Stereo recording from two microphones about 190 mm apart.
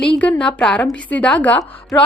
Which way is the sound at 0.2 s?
5° left (ahead or behind).